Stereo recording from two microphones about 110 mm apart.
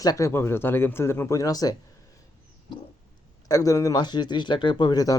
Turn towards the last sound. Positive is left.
turn(degrees=35)  # may be behind; listen again after turning